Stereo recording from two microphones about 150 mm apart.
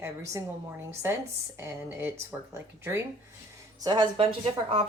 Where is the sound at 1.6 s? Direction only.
15° right (ahead or behind).